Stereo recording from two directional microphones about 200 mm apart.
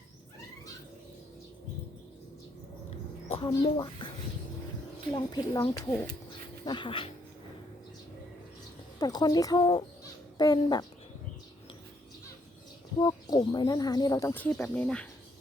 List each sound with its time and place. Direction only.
3.4 s speech: 25° left (ahead or behind)
5.1 s speech: 20° left (ahead or behind)
6.7 s speech: 25° left (ahead or behind)
9.0 s speech: 20° left (ahead or behind)
13.0 s speech: 20° left (ahead or behind)